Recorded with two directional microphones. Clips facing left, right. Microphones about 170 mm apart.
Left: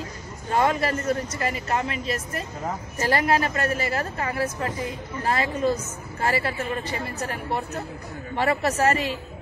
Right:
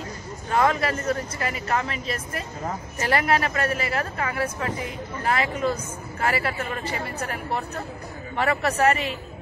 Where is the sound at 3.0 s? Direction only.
30° left (ahead or behind).